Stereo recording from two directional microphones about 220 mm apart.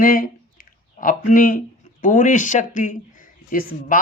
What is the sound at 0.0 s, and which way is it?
Speech, 40° left (ahead or behind).